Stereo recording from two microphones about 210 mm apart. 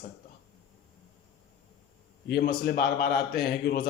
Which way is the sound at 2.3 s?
50° left (ahead or behind).